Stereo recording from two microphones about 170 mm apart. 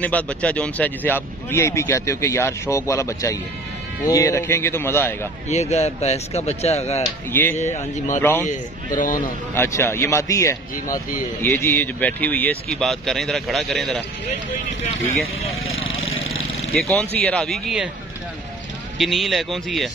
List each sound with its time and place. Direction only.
0.0 s speech: 10° left (ahead or behind)
5.5 s a man's voice: 40° left (ahead or behind)
8.2 s speech: 10° left (ahead or behind)
8.5 s a man's voice: 50° left (ahead or behind)
9.6 s speech: 15° left (ahead or behind)
16.7 s speech: 5° left (ahead or behind)
18.9 s speech: centre (ahead or behind)